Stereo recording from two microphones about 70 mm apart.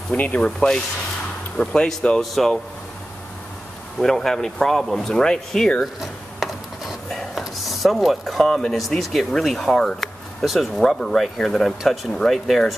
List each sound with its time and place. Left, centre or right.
0.2 s speech: left
1.6 s speech: centre
4.0 s speech: centre
5.9 s a sound: centre
7.2 s speech: centre